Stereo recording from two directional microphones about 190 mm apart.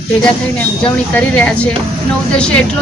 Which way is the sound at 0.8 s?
5° left (ahead or behind).